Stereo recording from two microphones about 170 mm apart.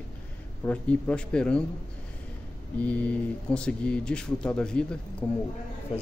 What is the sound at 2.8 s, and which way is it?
Speech, 10° left (ahead or behind).